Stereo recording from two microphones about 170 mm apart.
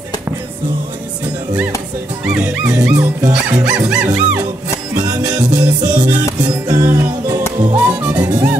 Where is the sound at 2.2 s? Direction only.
5° right (ahead or behind).